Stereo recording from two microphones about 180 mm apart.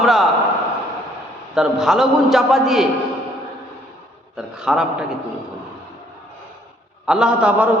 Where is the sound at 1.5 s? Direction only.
Centre (ahead or behind).